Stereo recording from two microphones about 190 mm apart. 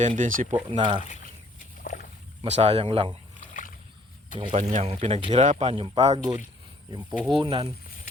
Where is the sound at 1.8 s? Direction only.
50° left (ahead or behind).